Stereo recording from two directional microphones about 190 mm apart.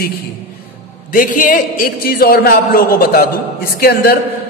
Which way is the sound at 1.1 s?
45° left (ahead or behind).